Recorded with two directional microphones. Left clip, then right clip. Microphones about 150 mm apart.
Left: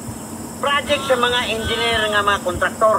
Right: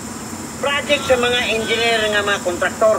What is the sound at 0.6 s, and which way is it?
Speech, 20° right (ahead or behind).